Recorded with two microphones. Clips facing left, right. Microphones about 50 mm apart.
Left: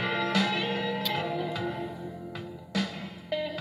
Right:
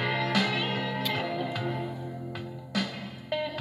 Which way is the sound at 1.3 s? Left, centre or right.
Right.